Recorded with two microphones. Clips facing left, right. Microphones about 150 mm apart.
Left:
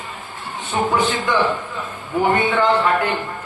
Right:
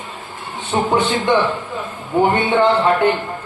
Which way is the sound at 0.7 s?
25° right (ahead or behind).